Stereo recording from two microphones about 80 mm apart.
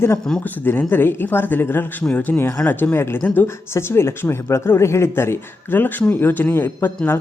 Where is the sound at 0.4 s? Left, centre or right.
Left.